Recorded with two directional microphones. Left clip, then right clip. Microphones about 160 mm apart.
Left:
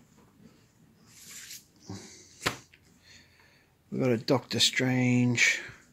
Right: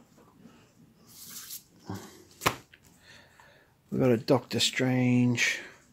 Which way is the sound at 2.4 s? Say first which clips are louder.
Right 3 dB; 25° right (ahead or behind).